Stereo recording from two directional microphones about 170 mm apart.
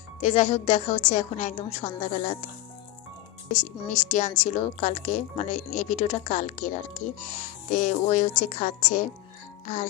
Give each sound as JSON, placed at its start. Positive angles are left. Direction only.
{"t": 0.2, "sound": "a woman's voice", "side_deg": 45}
{"t": 3.5, "sound": "a woman's voice", "side_deg": 45}